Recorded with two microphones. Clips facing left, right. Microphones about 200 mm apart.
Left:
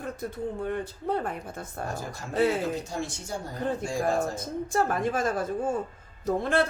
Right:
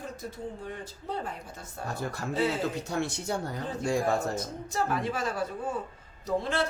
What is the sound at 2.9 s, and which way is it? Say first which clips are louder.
Speech: right 3 dB; 65° right (ahead or behind).